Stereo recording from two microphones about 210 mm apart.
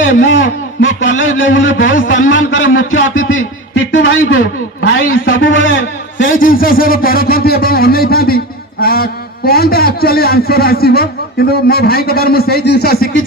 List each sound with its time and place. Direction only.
0.3 s a man's voice: 65° left (ahead or behind)
1.8 s a sound: 40° left (ahead or behind)
2.3 s a man's voice: 65° left (ahead or behind)
5.4 s a man's voice: 65° left (ahead or behind)
6.3 s a man's voice: 40° left (ahead or behind)